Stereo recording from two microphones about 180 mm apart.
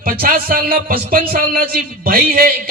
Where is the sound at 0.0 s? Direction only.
55° right (ahead or behind).